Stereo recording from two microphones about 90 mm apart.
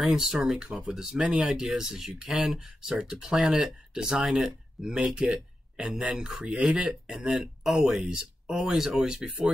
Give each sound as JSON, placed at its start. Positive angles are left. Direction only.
{"t": 0.0, "sound": "speech", "side_deg": -5}